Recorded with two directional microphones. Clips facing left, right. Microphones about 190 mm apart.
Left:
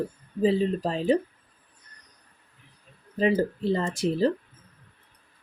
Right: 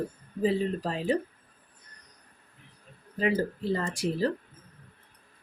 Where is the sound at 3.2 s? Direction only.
25° left (ahead or behind).